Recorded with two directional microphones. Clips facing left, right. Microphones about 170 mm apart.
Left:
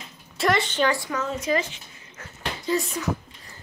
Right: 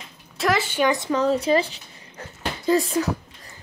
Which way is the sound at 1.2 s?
35° right (ahead or behind).